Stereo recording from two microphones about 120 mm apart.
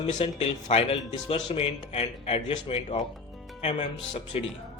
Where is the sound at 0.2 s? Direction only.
60° left (ahead or behind).